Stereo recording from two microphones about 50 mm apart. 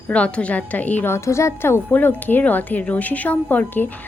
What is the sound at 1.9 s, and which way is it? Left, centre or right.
A woman's voice, left.